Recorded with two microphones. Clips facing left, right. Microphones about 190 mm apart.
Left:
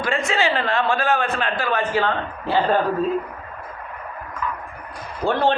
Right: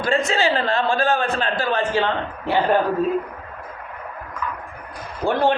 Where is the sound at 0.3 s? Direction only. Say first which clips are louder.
Right 1 dB; 35° right (ahead or behind); by 2.7 s 20° right (ahead or behind).